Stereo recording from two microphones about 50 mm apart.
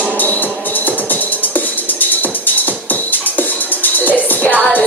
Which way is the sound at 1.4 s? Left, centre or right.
Left.